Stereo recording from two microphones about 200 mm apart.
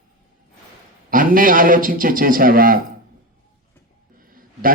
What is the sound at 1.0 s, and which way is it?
A man's voice, 45° right (ahead or behind).